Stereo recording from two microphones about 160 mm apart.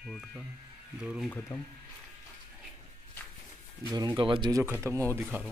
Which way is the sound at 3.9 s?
25° right (ahead or behind).